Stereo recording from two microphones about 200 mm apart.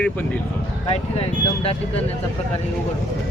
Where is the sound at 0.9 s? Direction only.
30° left (ahead or behind).